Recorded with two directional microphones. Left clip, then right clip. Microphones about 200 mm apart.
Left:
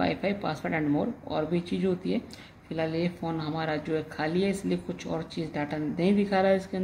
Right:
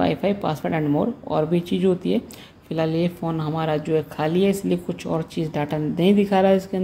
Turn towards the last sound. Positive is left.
turn(degrees=-30)  # may be behind; listen again after turning